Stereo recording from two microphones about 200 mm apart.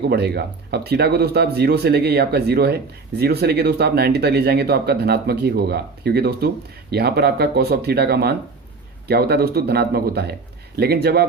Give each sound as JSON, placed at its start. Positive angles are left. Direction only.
{"t": 0.1, "sound": "speech", "side_deg": -55}